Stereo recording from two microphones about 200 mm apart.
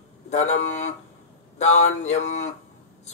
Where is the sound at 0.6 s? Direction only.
35° left (ahead or behind).